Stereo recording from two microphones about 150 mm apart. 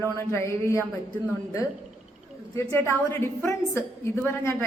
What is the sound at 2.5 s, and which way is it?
A woman's voice, 20° left (ahead or behind).